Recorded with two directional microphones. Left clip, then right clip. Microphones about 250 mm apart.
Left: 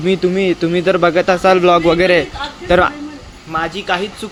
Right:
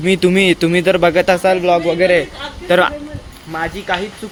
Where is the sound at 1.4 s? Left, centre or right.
Centre.